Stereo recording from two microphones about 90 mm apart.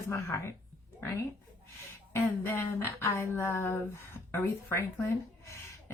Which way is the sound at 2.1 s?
25° left (ahead or behind).